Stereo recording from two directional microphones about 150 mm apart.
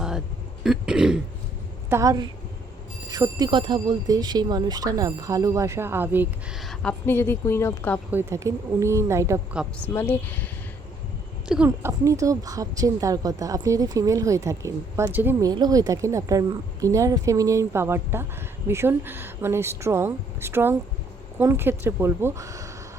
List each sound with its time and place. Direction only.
0.6 s throat clearing: 5° right (ahead or behind)
1.9 s speech: 20° right (ahead or behind)
6.6 s a sound: centre (ahead or behind)
7.0 s a woman's voice: 15° left (ahead or behind)
8.1 s speech: 20° right (ahead or behind)
9.5 s a woman's voice: 10° right (ahead or behind)
9.9 s a woman's voice: 15° left (ahead or behind)
11.4 s speech: 5° right (ahead or behind)
11.8 s speech: 20° right (ahead or behind)
15.4 s a woman's voice: 25° right (ahead or behind)